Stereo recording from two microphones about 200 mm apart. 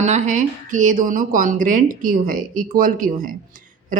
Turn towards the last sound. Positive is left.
turn(degrees=-45)  # may be behind; listen again after turning